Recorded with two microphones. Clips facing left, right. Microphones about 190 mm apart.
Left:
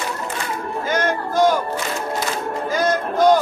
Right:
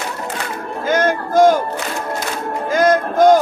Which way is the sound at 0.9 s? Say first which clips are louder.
Right 5 dB; 50° right (ahead or behind).